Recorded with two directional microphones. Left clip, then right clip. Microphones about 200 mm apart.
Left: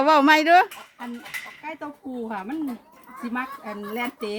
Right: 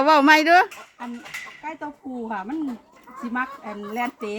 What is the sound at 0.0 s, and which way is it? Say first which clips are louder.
Speech: right 1 dB; centre (ahead or behind).